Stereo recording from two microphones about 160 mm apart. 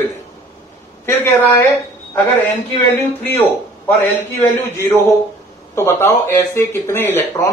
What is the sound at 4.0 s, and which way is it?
Speech, 15° left (ahead or behind).